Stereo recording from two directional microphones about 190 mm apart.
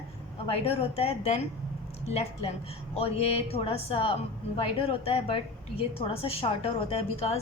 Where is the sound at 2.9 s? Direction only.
30° left (ahead or behind).